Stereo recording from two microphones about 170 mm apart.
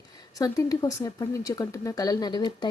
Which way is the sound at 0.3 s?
20° left (ahead or behind).